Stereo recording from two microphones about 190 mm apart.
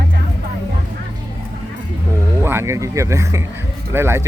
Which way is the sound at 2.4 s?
10° right (ahead or behind).